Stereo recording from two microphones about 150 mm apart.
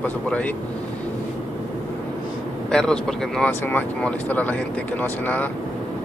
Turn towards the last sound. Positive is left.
turn(degrees=10)  # may be behind; listen again after turning